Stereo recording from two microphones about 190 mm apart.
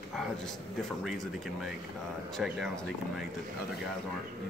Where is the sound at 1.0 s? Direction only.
Centre (ahead or behind).